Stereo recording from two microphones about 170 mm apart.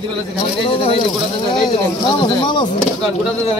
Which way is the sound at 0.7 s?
35° left (ahead or behind).